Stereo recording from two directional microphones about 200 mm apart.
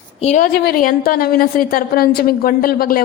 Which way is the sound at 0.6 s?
45° left (ahead or behind).